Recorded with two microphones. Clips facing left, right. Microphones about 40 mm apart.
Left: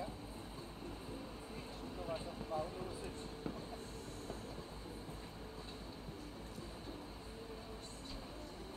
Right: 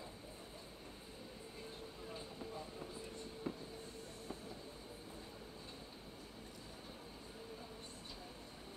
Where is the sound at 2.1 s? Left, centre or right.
Left.